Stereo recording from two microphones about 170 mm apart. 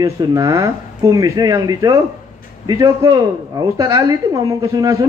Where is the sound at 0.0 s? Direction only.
20° right (ahead or behind).